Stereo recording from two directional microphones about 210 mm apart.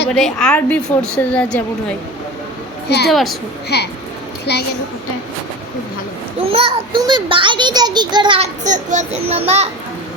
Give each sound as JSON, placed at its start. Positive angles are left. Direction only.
{"t": 0.1, "sound": "a woman's voice", "side_deg": 0}
{"t": 3.1, "sound": "a woman's voice", "side_deg": 0}
{"t": 3.7, "sound": "a woman's voice", "side_deg": 50}
{"t": 6.5, "sound": "a child's voice", "side_deg": -25}
{"t": 8.6, "sound": "a child's voice", "side_deg": -35}